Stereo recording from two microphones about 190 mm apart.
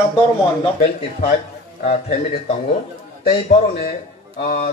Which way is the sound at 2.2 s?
35° left (ahead or behind).